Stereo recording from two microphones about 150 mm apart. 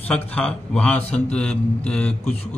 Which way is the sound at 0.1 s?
5° left (ahead or behind).